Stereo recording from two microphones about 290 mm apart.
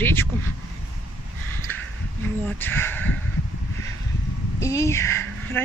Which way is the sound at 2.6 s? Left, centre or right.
Centre.